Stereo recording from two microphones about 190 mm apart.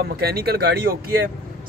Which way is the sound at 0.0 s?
55° right (ahead or behind).